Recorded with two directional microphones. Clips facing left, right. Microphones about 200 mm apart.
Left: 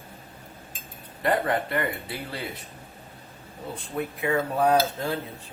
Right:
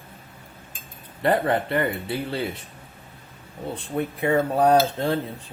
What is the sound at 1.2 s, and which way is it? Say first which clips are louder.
Speech: right 3 dB; 30° right (ahead or behind).